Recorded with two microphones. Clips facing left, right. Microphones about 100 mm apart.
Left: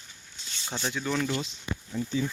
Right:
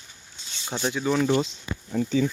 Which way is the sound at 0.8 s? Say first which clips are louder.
Right 6 dB; 10° right (ahead or behind).